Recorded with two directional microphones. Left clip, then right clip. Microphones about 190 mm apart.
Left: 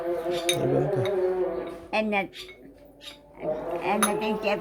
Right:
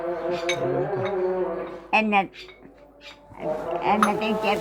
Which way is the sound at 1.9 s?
5° right (ahead or behind).